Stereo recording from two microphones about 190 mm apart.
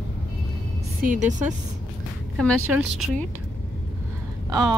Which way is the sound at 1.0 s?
40° right (ahead or behind).